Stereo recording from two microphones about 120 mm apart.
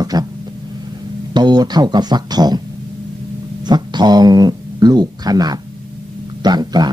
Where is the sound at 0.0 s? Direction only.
35° right (ahead or behind).